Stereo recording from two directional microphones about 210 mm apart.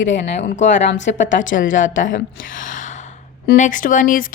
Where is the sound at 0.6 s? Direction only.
35° left (ahead or behind).